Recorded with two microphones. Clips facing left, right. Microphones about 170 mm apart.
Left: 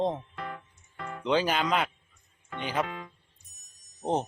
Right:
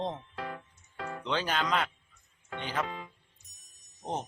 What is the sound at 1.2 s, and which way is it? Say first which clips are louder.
Speech: left 6 dB; 10° left (ahead or behind).